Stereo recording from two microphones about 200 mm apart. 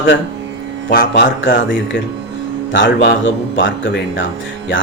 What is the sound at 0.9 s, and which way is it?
A man's voice, 60° left (ahead or behind).